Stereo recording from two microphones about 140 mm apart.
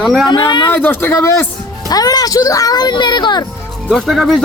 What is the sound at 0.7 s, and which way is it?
A man's voice, 15° left (ahead or behind).